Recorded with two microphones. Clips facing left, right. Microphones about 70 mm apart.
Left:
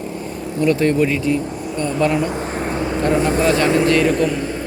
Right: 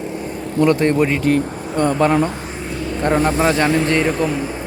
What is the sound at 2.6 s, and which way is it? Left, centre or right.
Vehicle, left.